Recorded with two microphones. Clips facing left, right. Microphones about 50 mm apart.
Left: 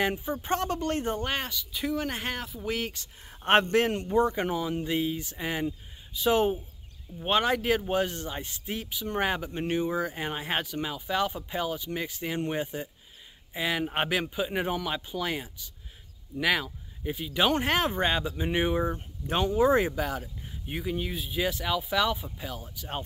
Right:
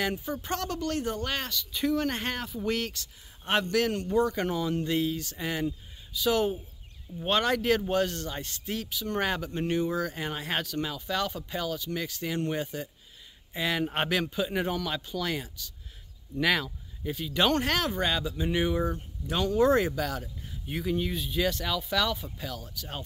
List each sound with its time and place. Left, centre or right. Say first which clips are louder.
0.0 s a man's voice: left 2 dB; left
3.4 s speech: left 4 dB; left; by 5.8 s centre
6.1 s speech: left 2 dB; left
7.2 s a man's voice: left 1 dB; centre
19.5 s a man's voice: even; centre